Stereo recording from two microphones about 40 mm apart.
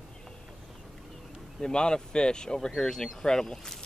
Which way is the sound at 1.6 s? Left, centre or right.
Left.